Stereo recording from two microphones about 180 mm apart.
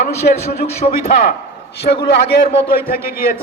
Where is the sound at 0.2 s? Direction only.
55° left (ahead or behind).